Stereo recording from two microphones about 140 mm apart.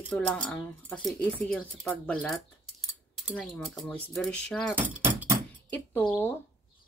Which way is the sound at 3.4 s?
5° left (ahead or behind).